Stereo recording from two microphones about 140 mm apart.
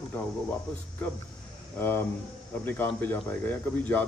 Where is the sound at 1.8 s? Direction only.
15° left (ahead or behind).